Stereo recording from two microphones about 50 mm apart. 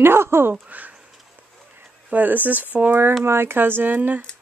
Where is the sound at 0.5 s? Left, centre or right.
Right.